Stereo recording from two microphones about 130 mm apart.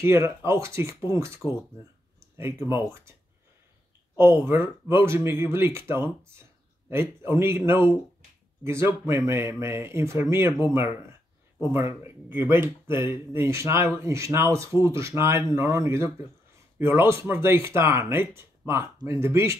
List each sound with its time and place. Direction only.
0.0 s speech: 20° right (ahead or behind)
4.2 s speech: 20° right (ahead or behind)